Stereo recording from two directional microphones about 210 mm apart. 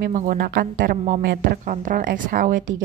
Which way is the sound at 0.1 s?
40° right (ahead or behind).